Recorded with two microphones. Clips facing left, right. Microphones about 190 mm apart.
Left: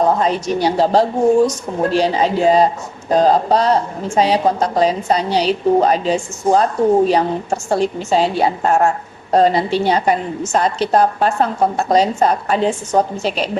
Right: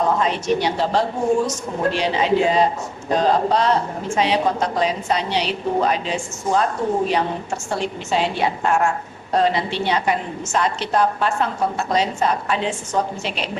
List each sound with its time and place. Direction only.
0.2 s a woman's voice: 35° left (ahead or behind)